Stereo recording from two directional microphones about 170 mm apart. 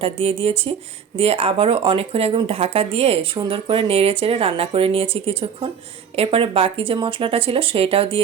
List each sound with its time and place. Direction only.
0.0 s speech: 35° right (ahead or behind)